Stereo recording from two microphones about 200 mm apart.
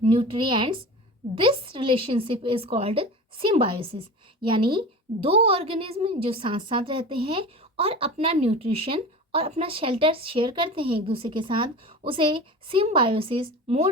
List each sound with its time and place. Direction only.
0.0 s a woman's voice: 25° right (ahead or behind)